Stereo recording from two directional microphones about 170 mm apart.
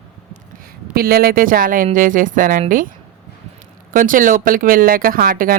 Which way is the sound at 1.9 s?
50° right (ahead or behind).